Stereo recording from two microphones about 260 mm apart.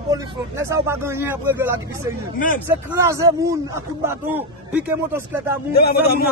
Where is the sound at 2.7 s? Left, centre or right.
Centre.